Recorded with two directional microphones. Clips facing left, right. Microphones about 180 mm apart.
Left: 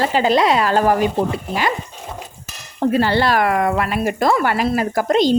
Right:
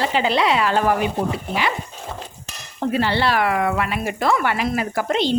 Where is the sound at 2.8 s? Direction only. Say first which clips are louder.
Left 4 dB; 40° left (ahead or behind).